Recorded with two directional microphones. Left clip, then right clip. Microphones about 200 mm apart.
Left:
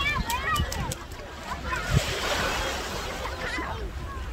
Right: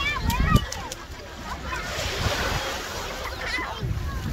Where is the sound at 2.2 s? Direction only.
20° left (ahead or behind).